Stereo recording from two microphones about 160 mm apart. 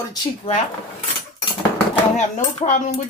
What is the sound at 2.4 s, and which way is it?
Speech, 50° left (ahead or behind).